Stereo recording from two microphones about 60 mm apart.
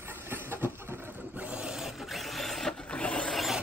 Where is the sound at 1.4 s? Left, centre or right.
Centre.